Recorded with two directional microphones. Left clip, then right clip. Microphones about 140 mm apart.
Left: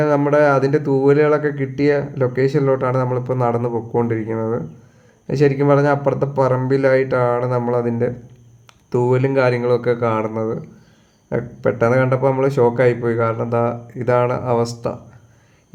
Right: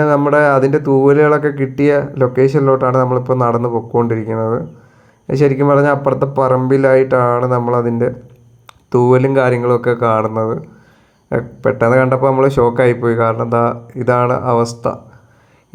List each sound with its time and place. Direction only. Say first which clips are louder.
0.3 s speech: right 2 dB; 20° right (ahead or behind)